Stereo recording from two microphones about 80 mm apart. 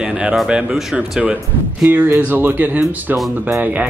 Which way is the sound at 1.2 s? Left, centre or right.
Centre.